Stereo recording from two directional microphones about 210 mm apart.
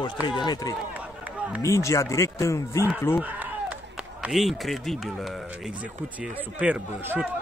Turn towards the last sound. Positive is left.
turn(degrees=-5)  # may be behind; listen again after turning